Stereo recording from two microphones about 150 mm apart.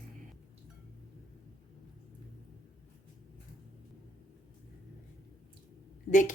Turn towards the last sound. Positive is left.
turn(degrees=60)  # may be behind; listen again after turning